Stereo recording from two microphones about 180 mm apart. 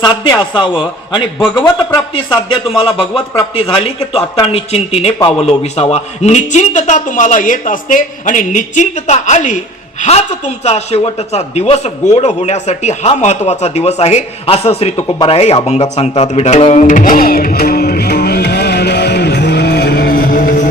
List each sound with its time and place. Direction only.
0.0 s a man's voice: 25° left (ahead or behind)
2.1 s a man's voice: 30° left (ahead or behind)
16.8 s music: 50° left (ahead or behind)